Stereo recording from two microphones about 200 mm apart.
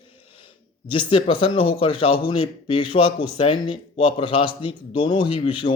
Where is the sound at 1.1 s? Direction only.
25° left (ahead or behind).